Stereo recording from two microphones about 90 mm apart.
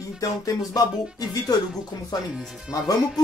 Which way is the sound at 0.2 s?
45° left (ahead or behind).